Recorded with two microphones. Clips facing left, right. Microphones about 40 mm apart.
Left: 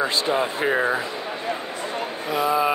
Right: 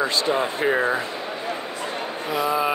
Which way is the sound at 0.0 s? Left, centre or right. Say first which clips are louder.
Even; centre.